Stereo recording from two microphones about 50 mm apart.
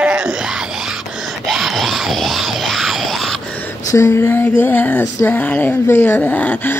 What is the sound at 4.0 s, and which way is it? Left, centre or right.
Speech, left.